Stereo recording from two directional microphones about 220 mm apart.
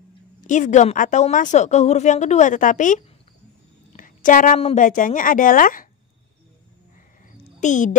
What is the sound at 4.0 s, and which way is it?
A woman's voice, 35° left (ahead or behind).